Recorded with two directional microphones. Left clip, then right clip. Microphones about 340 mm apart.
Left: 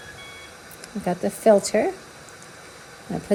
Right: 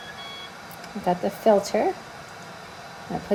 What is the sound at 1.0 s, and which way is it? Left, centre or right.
Speech, left.